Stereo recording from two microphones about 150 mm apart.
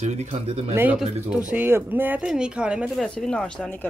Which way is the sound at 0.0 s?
50° right (ahead or behind).